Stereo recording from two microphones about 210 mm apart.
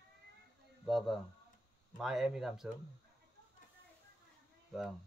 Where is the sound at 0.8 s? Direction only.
Centre (ahead or behind).